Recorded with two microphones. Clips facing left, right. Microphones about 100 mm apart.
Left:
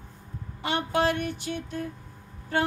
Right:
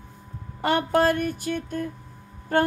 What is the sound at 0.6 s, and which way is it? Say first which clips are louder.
Female singing: right 5 dB; 45° right (ahead or behind).